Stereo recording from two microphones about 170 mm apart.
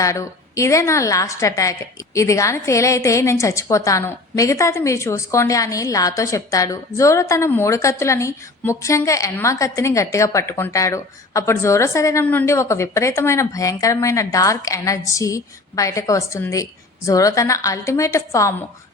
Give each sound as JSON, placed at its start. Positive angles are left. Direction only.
{"t": 0.0, "sound": "a woman's voice", "side_deg": 20}